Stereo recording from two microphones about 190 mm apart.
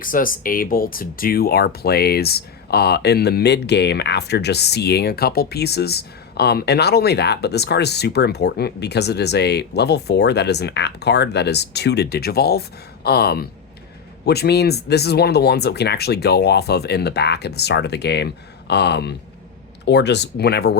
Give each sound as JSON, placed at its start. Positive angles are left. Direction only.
{"t": 0.0, "sound": "speech", "side_deg": 45}